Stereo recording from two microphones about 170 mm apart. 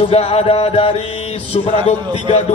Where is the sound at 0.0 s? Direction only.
35° left (ahead or behind).